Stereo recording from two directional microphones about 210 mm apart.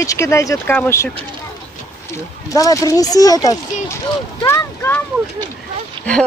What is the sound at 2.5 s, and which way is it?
Speech, 15° left (ahead or behind).